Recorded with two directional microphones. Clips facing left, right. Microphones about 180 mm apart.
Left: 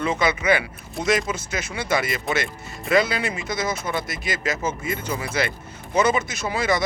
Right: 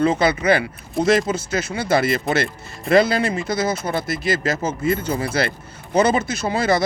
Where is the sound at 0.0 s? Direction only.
35° right (ahead or behind).